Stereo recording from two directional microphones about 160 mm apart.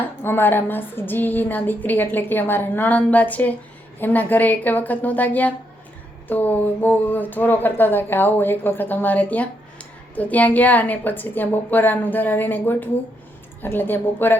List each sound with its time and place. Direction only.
0.0 s a woman's voice: 15° left (ahead or behind)